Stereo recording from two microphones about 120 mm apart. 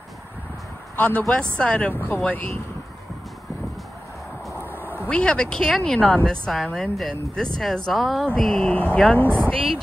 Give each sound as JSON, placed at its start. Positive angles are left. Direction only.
{"t": 0.9, "sound": "speech", "side_deg": 10}
{"t": 4.6, "sound": "quack", "side_deg": -15}
{"t": 5.1, "sound": "speech", "side_deg": 10}